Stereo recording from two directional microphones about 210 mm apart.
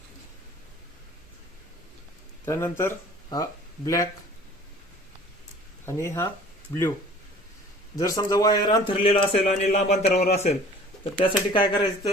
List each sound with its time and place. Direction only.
2.4 s speech: 10° left (ahead or behind)
5.8 s speech: 10° left (ahead or behind)
7.9 s a man's voice: 15° left (ahead or behind)